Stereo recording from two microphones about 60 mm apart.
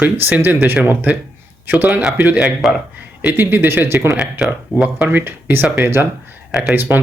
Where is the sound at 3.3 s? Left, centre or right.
Right.